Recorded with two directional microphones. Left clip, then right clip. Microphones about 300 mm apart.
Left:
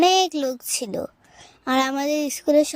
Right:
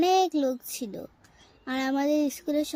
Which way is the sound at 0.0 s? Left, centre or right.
Left.